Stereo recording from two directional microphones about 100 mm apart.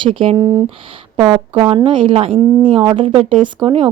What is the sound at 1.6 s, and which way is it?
Speech, 60° right (ahead or behind).